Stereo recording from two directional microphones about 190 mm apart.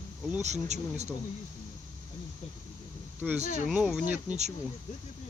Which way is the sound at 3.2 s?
5° left (ahead or behind).